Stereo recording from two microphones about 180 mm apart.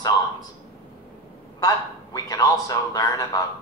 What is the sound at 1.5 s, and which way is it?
Speech, 20° left (ahead or behind).